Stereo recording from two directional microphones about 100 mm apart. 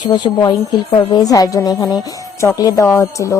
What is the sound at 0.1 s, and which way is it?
A woman's voice, 45° left (ahead or behind).